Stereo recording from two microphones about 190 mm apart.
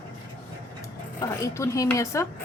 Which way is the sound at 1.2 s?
15° left (ahead or behind).